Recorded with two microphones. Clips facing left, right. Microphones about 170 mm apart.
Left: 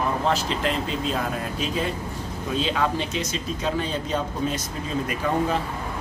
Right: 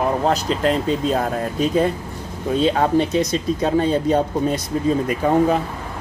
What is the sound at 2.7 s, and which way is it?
Speech, 40° right (ahead or behind).